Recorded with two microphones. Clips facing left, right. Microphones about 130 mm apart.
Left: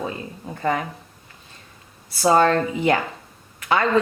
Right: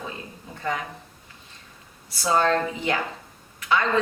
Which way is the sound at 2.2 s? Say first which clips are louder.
Left 5 dB; 45° left (ahead or behind).